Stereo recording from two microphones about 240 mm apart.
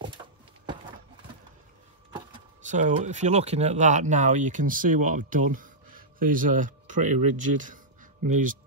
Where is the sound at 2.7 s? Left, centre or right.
Right.